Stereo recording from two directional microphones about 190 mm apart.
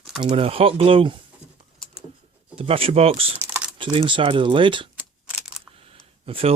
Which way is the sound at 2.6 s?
30° right (ahead or behind).